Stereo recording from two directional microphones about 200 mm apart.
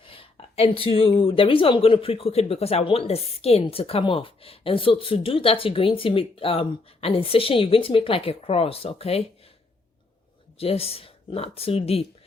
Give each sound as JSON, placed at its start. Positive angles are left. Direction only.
{"t": 0.0, "sound": "speech", "side_deg": 25}
{"t": 10.6, "sound": "speech", "side_deg": 30}